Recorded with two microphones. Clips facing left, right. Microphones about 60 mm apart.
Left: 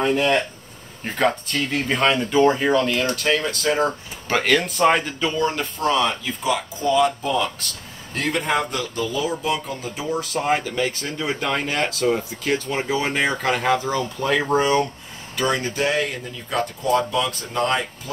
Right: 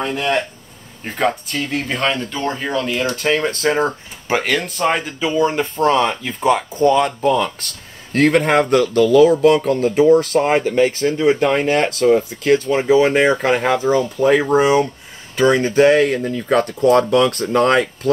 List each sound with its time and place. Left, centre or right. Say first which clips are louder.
0.0 s speech: even; centre
3.2 s speech: right 4 dB; right
3.7 s speech: right 3 dB; centre
5.3 s speech: right 9 dB; centre
5.9 s speech: right 3 dB; right
8.1 s speech: right 8 dB; right
10.4 s speech: right 7 dB; right
11.0 s speech: right 11 dB; centre
15.3 s speech: right 9 dB; right